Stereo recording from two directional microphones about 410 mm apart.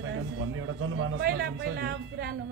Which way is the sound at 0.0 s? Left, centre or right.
Right.